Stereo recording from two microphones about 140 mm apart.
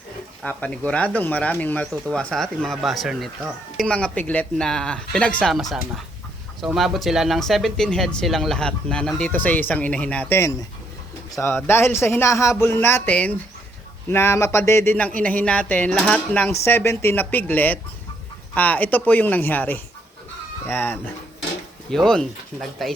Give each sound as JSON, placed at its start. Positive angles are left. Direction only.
{"t": 0.4, "sound": "speech", "side_deg": 10}
{"t": 21.8, "sound": "speech", "side_deg": 5}